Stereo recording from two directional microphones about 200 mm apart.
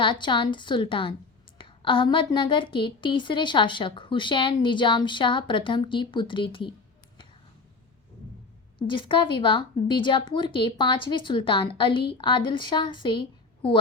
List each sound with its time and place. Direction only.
0.0 s a woman's voice: 25° left (ahead or behind)
8.9 s a woman's voice: 25° left (ahead or behind)